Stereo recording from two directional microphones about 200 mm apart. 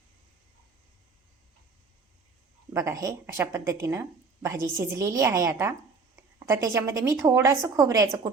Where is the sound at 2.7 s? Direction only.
15° right (ahead or behind).